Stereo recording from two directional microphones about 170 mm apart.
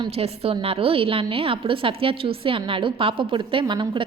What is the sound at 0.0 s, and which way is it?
A woman's voice, 30° right (ahead or behind).